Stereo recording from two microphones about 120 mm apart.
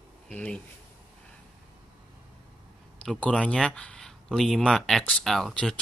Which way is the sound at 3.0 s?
10° left (ahead or behind).